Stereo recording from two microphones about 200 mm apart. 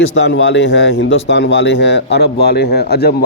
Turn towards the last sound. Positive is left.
turn(degrees=50)  # may be behind; listen again after turning